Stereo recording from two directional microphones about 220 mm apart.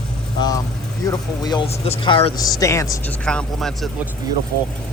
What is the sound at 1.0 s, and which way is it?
Speech, 15° left (ahead or behind).